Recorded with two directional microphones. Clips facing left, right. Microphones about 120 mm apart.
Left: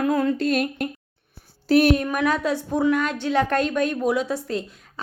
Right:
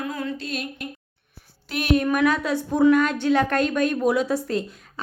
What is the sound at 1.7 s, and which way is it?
Speech, 35° left (ahead or behind).